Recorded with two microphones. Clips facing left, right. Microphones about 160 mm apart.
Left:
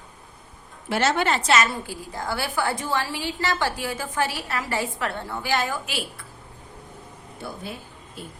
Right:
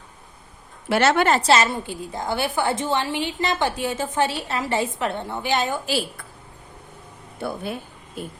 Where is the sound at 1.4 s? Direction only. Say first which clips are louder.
Right 3 dB; 30° right (ahead or behind).